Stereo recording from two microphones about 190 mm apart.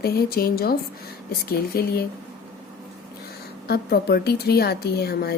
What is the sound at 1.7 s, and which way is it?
Speech, 55° left (ahead or behind).